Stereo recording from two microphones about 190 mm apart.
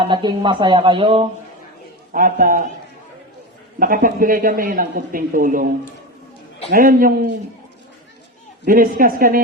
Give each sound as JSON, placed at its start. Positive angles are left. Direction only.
{"t": 0.0, "sound": "speech", "side_deg": -25}
{"t": 2.1, "sound": "speech", "side_deg": -45}
{"t": 3.8, "sound": "speech", "side_deg": -45}
{"t": 6.7, "sound": "speech", "side_deg": -45}
{"t": 8.6, "sound": "speech", "side_deg": -45}